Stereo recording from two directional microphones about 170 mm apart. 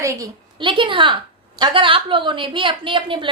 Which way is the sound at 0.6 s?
30° right (ahead or behind).